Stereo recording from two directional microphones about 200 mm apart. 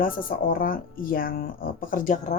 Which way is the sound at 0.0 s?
45° left (ahead or behind).